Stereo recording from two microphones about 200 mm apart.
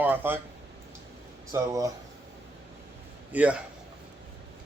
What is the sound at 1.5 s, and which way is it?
Speech, 15° right (ahead or behind).